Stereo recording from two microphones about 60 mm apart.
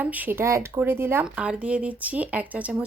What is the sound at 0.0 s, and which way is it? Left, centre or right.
Speech, right.